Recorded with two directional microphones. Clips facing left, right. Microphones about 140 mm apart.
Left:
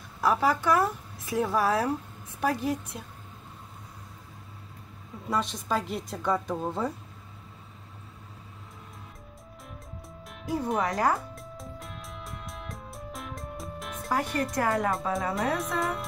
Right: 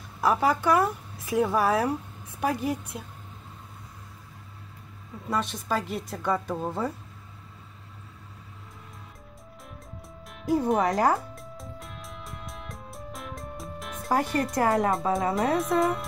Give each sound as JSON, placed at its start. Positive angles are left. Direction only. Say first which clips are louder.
{"t": 0.2, "sound": "speech", "louder": "right 1 dB", "side_deg": -10}
{"t": 1.3, "sound": "a woman's voice", "louder": "right 2 dB", "side_deg": -5}
{"t": 5.3, "sound": "a woman's voice", "louder": "even", "side_deg": 0}
{"t": 10.2, "sound": "music", "louder": "right 6 dB", "side_deg": 0}
{"t": 10.8, "sound": "speech", "louder": "right 3 dB", "side_deg": -30}
{"t": 11.1, "sound": "music", "louder": "right 1 dB", "side_deg": 0}
{"t": 14.6, "sound": "speech", "louder": "right 4 dB", "side_deg": -30}
{"t": 15.3, "sound": "a woman's voice", "louder": "right 5 dB", "side_deg": 0}